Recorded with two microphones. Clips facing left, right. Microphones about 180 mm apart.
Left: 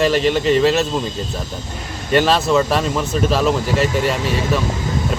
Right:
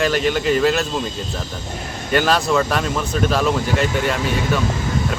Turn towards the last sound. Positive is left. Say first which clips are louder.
# left 1 dB
turn(degrees=0)  # may be behind; listen again after turning